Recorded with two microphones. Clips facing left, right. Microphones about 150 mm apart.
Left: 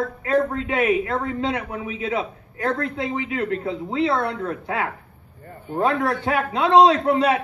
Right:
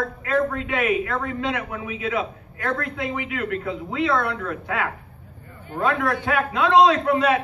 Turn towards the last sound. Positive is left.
turn(degrees=30)  # may be behind; listen again after turning